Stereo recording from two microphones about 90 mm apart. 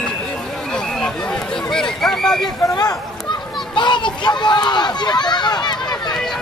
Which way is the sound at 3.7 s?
60° left (ahead or behind).